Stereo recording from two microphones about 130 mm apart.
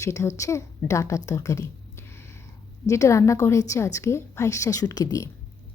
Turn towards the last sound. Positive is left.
turn(degrees=25)  # may be behind; listen again after turning